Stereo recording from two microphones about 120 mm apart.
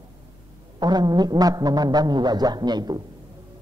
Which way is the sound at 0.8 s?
35° right (ahead or behind).